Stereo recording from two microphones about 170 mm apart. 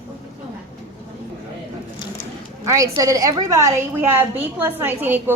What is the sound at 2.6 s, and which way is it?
A woman's voice, 20° right (ahead or behind).